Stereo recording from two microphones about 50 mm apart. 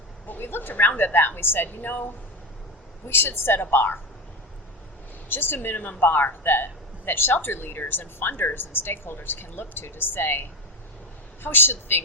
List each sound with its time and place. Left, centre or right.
0.3 s speech: left
3.1 s speech: left
5.3 s speech: left